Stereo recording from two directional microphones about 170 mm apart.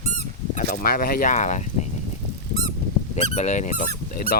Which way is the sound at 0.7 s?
60° left (ahead or behind).